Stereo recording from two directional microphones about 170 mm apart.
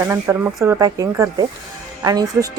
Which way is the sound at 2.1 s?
20° right (ahead or behind).